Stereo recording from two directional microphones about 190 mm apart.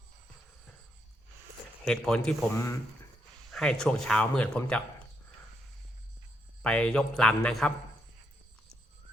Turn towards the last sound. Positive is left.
turn(degrees=5)  # may be behind; listen again after turning